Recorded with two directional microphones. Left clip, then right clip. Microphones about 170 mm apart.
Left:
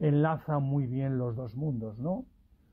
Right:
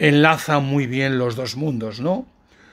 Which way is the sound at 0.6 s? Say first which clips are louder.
Right 13 dB; 30° right (ahead or behind).